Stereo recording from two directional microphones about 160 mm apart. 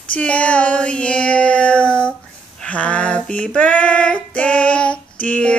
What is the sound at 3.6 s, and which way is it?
Child singing, 5° left (ahead or behind).